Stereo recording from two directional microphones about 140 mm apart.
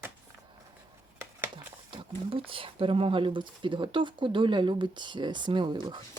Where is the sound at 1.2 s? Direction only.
15° right (ahead or behind).